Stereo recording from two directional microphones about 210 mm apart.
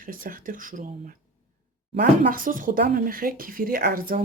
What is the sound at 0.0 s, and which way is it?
Speech, 40° right (ahead or behind).